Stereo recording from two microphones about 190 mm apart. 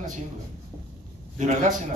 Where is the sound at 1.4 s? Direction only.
40° right (ahead or behind).